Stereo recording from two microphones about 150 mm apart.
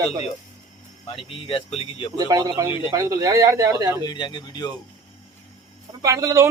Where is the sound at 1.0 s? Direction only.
40° left (ahead or behind).